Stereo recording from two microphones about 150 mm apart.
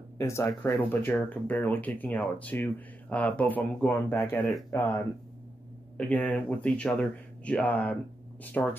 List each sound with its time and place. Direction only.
0.2 s speech: 20° left (ahead or behind)